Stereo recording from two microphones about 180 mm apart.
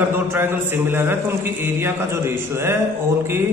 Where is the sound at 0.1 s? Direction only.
10° right (ahead or behind).